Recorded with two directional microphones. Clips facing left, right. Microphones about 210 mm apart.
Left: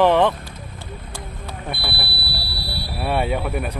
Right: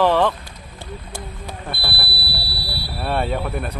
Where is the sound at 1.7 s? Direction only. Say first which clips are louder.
Left 2 dB; 20° left (ahead or behind).